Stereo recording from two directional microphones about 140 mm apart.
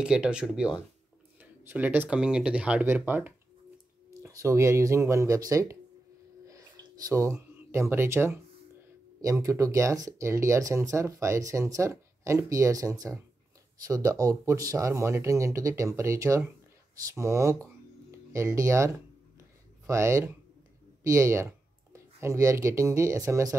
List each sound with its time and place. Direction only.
0.0 s speech: 5° right (ahead or behind); by 5.8 s 20° right (ahead or behind)
6.4 s a sound: 25° right (ahead or behind)
9.2 s speech: 25° right (ahead or behind)
19.9 s speech: 20° right (ahead or behind)